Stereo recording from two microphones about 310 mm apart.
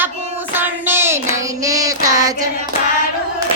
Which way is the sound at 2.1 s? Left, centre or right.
Centre.